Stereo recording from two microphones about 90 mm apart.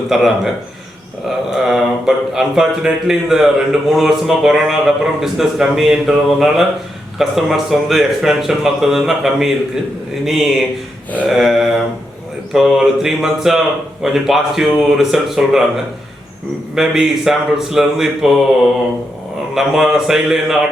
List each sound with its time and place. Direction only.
0.1 s speech: 5° right (ahead or behind)
1.5 s speech: 5° right (ahead or behind)
16.7 s speech: 5° right (ahead or behind)
19.5 s speech: 5° right (ahead or behind)